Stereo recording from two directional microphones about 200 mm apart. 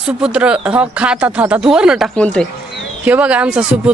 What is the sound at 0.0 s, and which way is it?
A woman's voice, 5° right (ahead or behind).